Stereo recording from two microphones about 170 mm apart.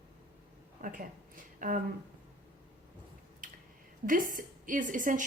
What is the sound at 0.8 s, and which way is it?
A woman's voice, 50° right (ahead or behind).